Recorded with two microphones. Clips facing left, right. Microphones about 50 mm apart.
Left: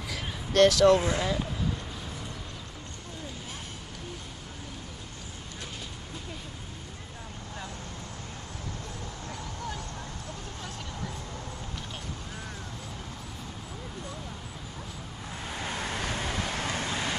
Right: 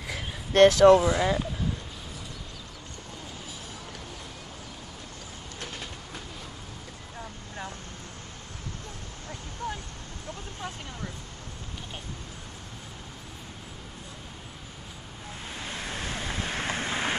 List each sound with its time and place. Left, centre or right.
0.0 s speech: right
15.6 s vehicle: left
16.3 s vehicle: right